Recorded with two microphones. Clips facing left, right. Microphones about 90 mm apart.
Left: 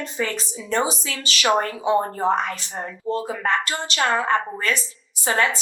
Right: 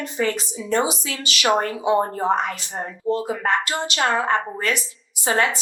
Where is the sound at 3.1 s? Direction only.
35° left (ahead or behind).